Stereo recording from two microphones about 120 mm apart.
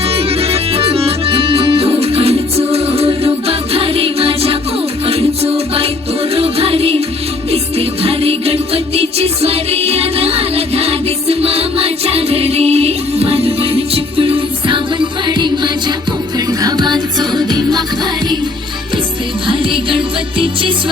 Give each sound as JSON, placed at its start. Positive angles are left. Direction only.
{"t": 0.1, "sound": "music", "side_deg": -55}
{"t": 19.5, "sound": "music", "side_deg": -45}